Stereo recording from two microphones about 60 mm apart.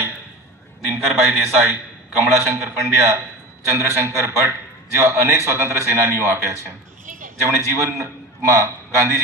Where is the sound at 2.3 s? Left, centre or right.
Right.